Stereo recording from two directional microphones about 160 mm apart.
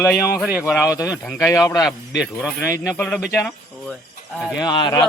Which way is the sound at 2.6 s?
15° left (ahead or behind).